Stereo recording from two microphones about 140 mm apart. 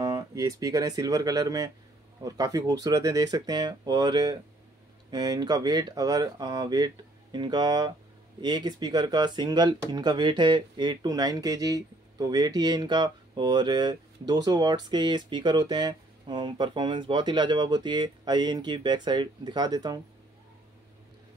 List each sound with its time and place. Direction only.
0.0 s speech: 25° right (ahead or behind)